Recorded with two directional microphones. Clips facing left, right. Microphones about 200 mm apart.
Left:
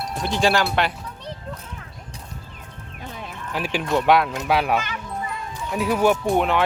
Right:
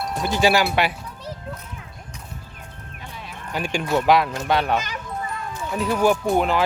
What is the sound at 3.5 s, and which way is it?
Speech, 5° left (ahead or behind).